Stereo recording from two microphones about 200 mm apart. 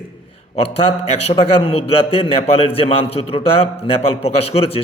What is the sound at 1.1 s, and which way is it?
A man's voice, 30° left (ahead or behind).